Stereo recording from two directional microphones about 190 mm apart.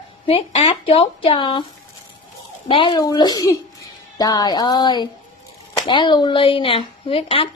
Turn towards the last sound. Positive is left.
turn(degrees=30)  # may be behind; listen again after turning